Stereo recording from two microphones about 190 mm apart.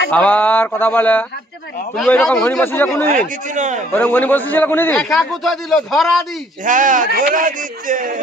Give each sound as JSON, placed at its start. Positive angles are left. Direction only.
{"t": 0.1, "sound": "a man's voice", "side_deg": 10}
{"t": 3.5, "sound": "a man's voice", "side_deg": -40}
{"t": 3.9, "sound": "a man's voice", "side_deg": 10}
{"t": 6.7, "sound": "speech", "side_deg": -45}